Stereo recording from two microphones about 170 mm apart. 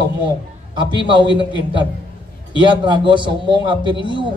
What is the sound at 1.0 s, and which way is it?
A woman's voice, 30° right (ahead or behind).